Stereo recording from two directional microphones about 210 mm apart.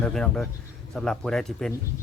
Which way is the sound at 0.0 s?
5° left (ahead or behind).